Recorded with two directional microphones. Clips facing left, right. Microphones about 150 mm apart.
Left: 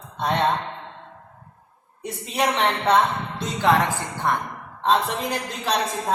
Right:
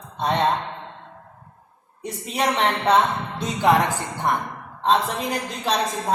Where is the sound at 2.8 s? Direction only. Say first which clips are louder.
Right 1 dB; 10° right (ahead or behind).